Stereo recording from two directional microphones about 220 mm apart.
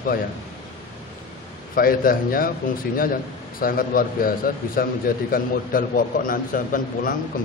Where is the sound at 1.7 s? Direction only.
40° left (ahead or behind).